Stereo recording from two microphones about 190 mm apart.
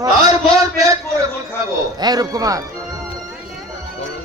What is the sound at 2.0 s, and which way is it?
Speech, 20° right (ahead or behind).